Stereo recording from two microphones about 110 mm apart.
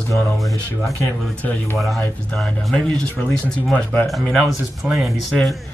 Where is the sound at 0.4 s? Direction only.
Centre (ahead or behind).